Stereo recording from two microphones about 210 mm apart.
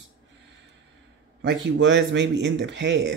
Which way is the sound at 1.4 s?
60° right (ahead or behind).